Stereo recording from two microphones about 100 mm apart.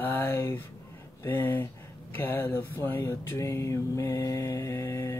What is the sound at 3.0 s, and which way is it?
Speech, 30° left (ahead or behind).